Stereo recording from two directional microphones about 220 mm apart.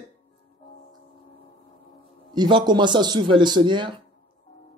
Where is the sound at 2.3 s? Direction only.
20° right (ahead or behind).